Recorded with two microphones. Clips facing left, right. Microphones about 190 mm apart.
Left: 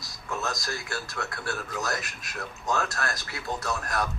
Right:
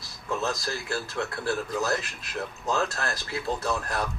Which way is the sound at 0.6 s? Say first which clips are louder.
Right 3 dB; 30° right (ahead or behind).